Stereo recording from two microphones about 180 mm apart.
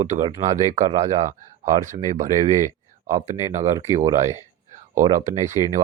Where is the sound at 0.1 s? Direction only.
35° right (ahead or behind).